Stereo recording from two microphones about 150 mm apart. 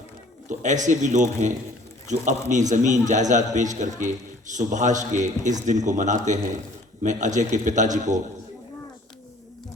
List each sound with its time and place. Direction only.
0.4 s a man's voice: 55° right (ahead or behind)